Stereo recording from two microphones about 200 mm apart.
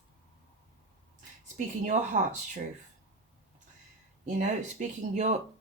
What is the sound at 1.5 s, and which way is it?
Speech, 35° right (ahead or behind).